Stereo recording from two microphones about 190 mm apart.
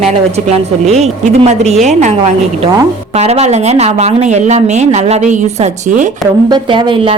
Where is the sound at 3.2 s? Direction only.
35° right (ahead or behind).